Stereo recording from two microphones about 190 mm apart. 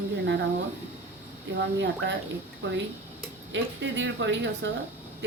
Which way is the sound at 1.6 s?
70° right (ahead or behind).